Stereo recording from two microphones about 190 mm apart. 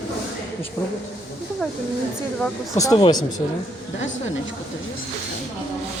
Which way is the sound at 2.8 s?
20° left (ahead or behind).